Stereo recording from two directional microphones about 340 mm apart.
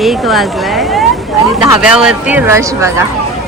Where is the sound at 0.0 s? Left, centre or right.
Centre.